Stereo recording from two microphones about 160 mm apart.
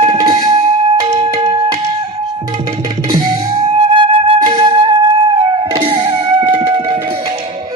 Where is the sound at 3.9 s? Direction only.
35° right (ahead or behind).